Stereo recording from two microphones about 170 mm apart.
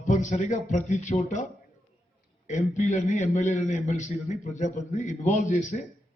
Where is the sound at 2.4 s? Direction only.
45° left (ahead or behind).